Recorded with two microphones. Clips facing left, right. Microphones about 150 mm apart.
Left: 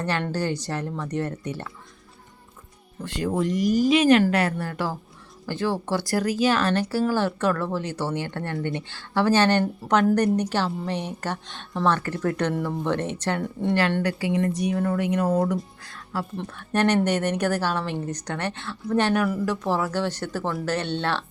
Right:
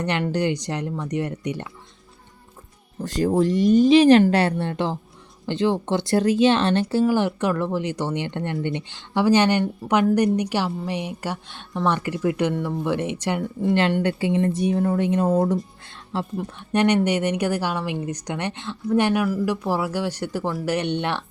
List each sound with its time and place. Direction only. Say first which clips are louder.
0.0 s a woman's voice: right 3 dB; 20° right (ahead or behind)
3.0 s a woman's voice: right 5 dB; 35° right (ahead or behind); by 13.4 s 10° right (ahead or behind)
13.4 s speech: right 3 dB; centre (ahead or behind)
14.0 s speech: right 3 dB; 25° right (ahead or behind)
15.8 s music: right 2 dB; 25° right (ahead or behind)
16.4 s a woman's voice: right 2 dB; 15° right (ahead or behind)